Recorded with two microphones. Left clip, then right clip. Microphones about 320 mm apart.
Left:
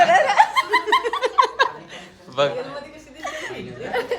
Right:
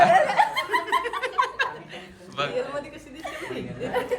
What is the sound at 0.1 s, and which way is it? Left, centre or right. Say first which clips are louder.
Chuckle: left 4 dB; left.